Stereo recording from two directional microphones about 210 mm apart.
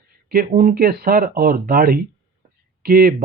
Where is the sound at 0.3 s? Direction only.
45° right (ahead or behind).